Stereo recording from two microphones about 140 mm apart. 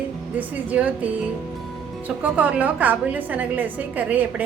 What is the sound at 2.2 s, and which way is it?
A woman's voice, 10° right (ahead or behind).